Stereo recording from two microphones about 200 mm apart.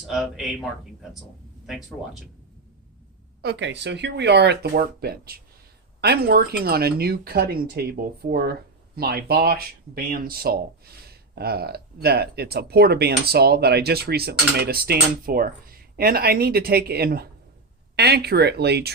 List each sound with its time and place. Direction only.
0.1 s speech: centre (ahead or behind)
3.4 s speech: 60° right (ahead or behind)